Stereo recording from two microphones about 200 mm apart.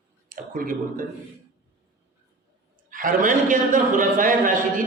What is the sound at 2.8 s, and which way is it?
A man's voice, 40° right (ahead or behind).